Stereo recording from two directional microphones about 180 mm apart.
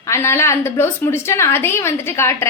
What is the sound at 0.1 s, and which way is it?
A woman's voice, 15° left (ahead or behind).